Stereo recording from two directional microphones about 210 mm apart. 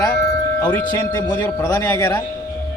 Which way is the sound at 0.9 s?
20° left (ahead or behind).